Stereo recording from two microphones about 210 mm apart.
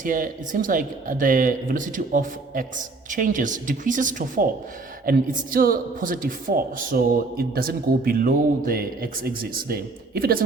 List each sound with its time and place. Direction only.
0.0 s speech: 40° right (ahead or behind)